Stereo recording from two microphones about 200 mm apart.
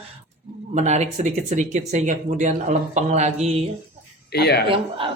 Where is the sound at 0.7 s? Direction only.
35° right (ahead or behind).